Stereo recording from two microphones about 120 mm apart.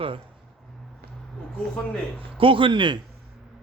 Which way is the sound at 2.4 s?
45° right (ahead or behind).